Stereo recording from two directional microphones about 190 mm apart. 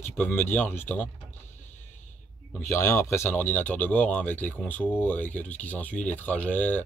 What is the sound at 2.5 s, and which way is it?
A man's voice, 15° left (ahead or behind).